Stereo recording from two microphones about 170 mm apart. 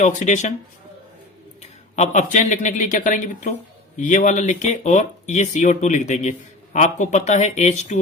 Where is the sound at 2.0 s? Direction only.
45° left (ahead or behind).